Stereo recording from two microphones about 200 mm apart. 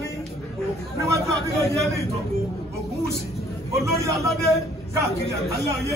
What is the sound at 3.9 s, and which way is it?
A man's voice, 15° right (ahead or behind).